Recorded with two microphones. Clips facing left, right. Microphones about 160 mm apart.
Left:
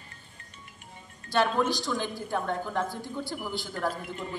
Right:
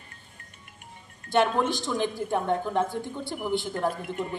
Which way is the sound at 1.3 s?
25° right (ahead or behind).